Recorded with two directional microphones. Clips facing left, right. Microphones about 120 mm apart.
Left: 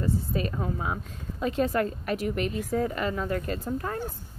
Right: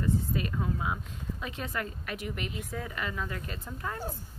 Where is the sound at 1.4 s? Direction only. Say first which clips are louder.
Left 12 dB; 40° left (ahead or behind).